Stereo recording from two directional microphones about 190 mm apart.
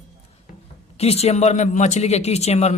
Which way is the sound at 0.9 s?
35° left (ahead or behind).